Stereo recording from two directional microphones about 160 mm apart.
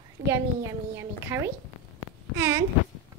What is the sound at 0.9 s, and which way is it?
Speech, 15° right (ahead or behind).